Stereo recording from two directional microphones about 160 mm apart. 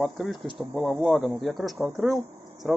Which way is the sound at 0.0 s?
Centre (ahead or behind).